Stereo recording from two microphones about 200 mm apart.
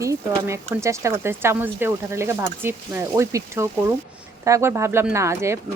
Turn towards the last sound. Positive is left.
turn(degrees=-15)  # may be behind; listen again after turning